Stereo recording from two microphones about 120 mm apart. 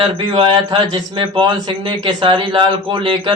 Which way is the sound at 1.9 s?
40° right (ahead or behind).